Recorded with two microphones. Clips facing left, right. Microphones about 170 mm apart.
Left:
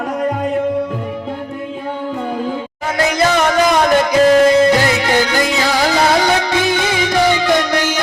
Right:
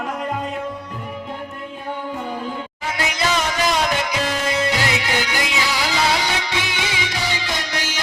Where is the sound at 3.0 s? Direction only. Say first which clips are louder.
Left 8 dB; 45° left (ahead or behind).